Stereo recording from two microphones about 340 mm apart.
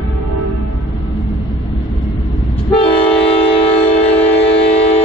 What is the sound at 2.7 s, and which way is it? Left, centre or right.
Train, centre.